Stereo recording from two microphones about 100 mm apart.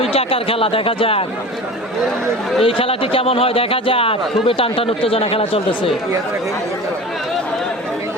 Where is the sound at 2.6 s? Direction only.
65° left (ahead or behind).